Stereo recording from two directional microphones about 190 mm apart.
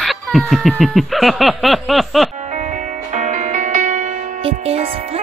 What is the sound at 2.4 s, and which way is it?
Music, 40° right (ahead or behind).